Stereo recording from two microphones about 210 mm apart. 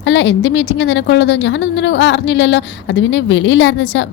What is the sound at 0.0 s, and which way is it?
A woman's voice, 60° left (ahead or behind).